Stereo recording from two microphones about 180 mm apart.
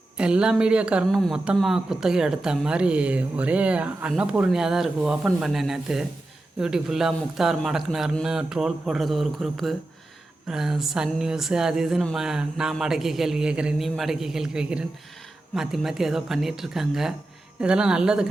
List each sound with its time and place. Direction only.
0.2 s speech: 5° right (ahead or behind)